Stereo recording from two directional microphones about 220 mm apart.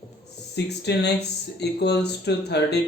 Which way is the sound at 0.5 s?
50° left (ahead or behind).